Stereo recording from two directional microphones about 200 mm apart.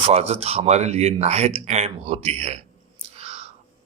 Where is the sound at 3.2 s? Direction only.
30° right (ahead or behind).